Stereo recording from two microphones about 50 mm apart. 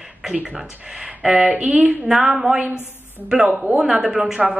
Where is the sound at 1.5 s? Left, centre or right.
Right.